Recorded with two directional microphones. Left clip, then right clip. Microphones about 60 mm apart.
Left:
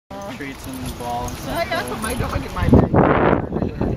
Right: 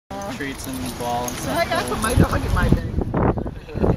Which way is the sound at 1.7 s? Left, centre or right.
Left.